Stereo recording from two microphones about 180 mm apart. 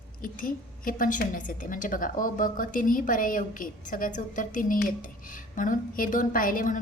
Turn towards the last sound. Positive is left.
turn(degrees=50)  # may be behind; listen again after turning